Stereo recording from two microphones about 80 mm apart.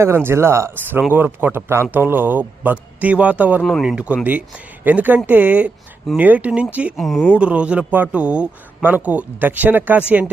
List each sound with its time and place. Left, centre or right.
0.0 s speech: right
1.1 s a man's voice: right
6.9 s speech: centre
7.3 s a man's voice: centre